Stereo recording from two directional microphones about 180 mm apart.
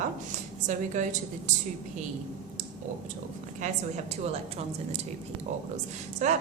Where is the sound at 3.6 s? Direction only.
35° right (ahead or behind).